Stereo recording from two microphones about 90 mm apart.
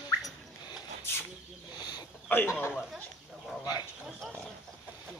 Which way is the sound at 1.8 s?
50° left (ahead or behind).